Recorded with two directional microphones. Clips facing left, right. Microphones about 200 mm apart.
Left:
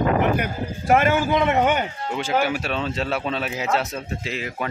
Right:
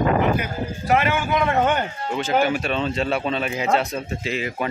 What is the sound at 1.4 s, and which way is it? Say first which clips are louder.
Speech: right 2 dB; 20° left (ahead or behind).